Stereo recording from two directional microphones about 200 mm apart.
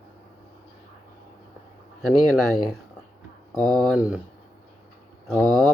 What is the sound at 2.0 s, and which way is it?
Speech, centre (ahead or behind).